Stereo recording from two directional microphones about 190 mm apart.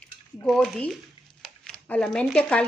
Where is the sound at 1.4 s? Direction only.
Centre (ahead or behind).